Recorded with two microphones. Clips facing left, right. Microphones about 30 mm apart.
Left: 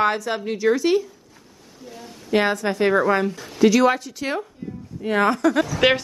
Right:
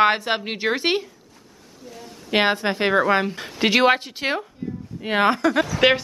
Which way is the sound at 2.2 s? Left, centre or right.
Right.